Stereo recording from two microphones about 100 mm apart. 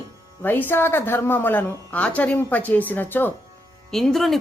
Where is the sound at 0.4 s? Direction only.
20° left (ahead or behind).